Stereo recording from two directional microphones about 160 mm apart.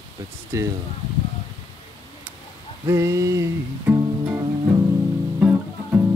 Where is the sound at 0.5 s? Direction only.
20° right (ahead or behind).